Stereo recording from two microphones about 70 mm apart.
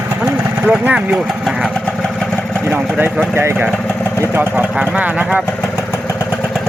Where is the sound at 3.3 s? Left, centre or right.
Right.